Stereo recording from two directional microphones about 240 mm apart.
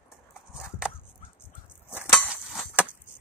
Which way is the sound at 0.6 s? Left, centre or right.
Centre.